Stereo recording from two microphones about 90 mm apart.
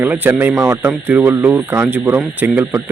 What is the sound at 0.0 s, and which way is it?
Speech, 25° right (ahead or behind).